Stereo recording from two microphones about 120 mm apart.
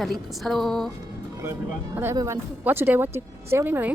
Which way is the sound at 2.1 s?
25° right (ahead or behind).